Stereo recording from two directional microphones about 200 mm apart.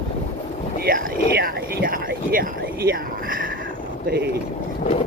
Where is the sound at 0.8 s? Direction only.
45° right (ahead or behind).